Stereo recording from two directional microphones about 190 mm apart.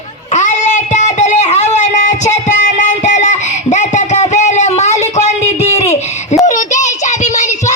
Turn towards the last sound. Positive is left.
turn(degrees=40)  # may be behind; listen again after turning